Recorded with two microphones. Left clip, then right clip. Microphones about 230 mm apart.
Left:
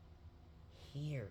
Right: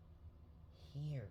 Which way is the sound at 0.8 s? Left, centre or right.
Left.